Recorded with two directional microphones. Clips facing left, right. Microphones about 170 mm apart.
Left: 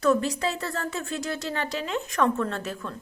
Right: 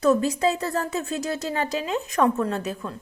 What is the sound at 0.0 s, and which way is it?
A woman's voice, 20° right (ahead or behind).